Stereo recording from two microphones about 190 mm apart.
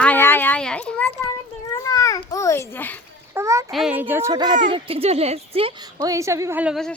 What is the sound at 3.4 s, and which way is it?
Speech, 15° right (ahead or behind).